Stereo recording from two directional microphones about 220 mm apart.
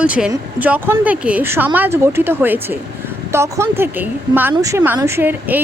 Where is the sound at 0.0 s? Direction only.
5° right (ahead or behind).